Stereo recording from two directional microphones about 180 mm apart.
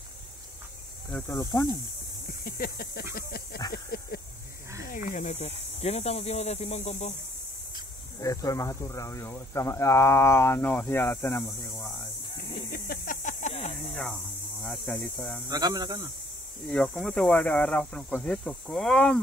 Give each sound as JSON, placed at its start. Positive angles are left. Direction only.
{"t": 1.1, "sound": "speech", "side_deg": 15}
{"t": 2.4, "sound": "a sound", "side_deg": 55}
{"t": 4.8, "sound": "speech", "side_deg": 45}
{"t": 8.2, "sound": "speech", "side_deg": 20}
{"t": 12.7, "sound": "snake", "side_deg": 55}
{"t": 13.9, "sound": "speech", "side_deg": 5}
{"t": 15.5, "sound": "speech", "side_deg": -20}
{"t": 16.6, "sound": "speech", "side_deg": 5}